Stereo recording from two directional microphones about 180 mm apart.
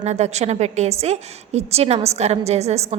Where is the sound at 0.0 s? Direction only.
40° right (ahead or behind).